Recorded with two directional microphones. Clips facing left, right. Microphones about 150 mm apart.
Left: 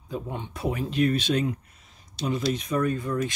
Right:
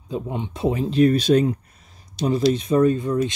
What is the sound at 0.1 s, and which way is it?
Speech, 20° right (ahead or behind).